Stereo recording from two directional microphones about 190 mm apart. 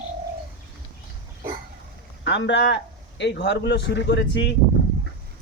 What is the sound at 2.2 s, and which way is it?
A man's voice, 70° left (ahead or behind).